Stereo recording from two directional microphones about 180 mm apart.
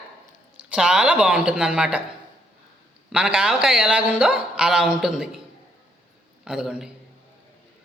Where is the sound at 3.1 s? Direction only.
5° right (ahead or behind).